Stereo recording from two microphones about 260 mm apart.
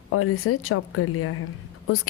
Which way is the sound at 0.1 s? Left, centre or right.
Left.